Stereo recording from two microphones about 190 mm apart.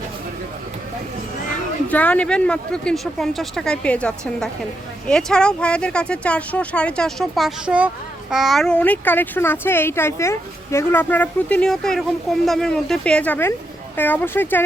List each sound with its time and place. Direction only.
1.9 s speech: 10° left (ahead or behind)